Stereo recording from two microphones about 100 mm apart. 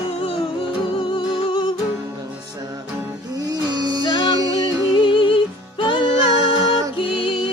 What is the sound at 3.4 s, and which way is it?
Music, 40° right (ahead or behind).